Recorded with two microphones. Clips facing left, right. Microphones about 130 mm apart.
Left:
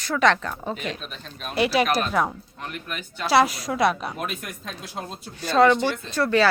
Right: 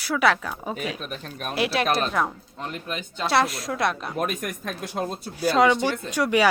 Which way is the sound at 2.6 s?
25° right (ahead or behind).